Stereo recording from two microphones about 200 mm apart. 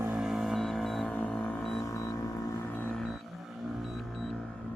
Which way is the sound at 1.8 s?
15° left (ahead or behind).